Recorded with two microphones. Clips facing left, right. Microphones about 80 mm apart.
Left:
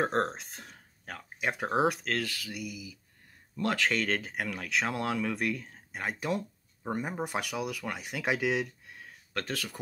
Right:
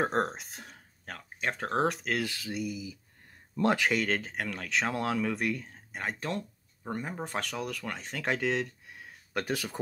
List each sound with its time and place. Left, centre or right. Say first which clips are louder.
0.0 s speech: even; centre
2.0 s speech: right 1 dB; centre
3.5 s speech: right 3 dB; right
3.9 s speech: right 1 dB; centre
8.8 s a sound: right 1 dB; centre
9.3 s speech: right 3 dB; centre